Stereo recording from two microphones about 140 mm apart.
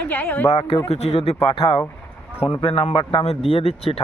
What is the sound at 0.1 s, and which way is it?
Speech, 15° left (ahead or behind).